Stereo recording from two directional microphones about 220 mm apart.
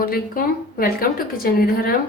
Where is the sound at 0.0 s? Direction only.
40° left (ahead or behind).